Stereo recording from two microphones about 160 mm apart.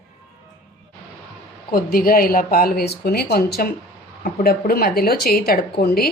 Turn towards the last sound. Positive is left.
turn(degrees=75)  # may be behind; listen again after turning